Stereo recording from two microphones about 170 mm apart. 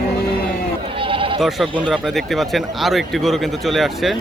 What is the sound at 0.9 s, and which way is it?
Sheep, 30° right (ahead or behind).